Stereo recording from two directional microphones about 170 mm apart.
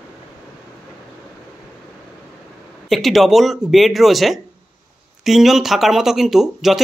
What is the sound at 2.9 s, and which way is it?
Speech, centre (ahead or behind).